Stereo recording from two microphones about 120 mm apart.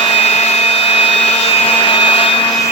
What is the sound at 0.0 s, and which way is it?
Vacuum cleaner, 55° left (ahead or behind).